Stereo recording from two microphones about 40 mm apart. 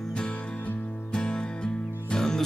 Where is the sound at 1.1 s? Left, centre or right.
Left.